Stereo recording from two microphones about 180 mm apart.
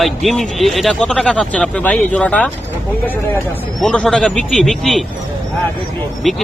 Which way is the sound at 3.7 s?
5° left (ahead or behind).